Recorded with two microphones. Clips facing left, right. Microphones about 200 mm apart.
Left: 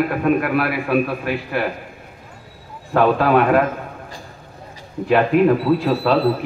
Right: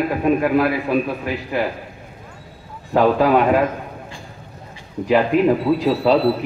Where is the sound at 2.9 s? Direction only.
15° right (ahead or behind).